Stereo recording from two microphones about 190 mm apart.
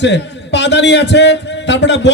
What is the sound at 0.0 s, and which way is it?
A man's voice, 65° left (ahead or behind).